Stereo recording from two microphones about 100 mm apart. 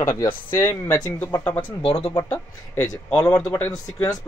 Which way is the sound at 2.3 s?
30° left (ahead or behind).